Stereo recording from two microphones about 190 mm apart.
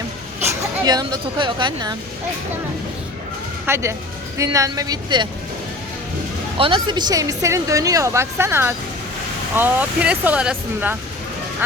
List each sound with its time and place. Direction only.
0.3 s speech: 15° right (ahead or behind)
3.7 s a woman's voice: 15° right (ahead or behind)
6.6 s speech: 25° right (ahead or behind); by 10.9 s 5° right (ahead or behind)